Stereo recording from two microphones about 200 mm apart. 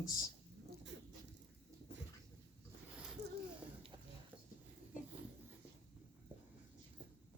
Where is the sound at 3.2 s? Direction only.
35° right (ahead or behind).